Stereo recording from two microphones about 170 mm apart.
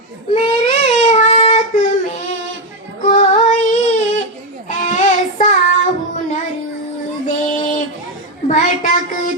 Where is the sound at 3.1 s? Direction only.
45° left (ahead or behind).